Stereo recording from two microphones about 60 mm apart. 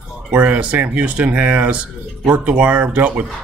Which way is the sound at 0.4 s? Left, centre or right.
Right.